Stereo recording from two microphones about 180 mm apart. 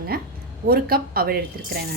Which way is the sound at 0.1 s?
55° right (ahead or behind).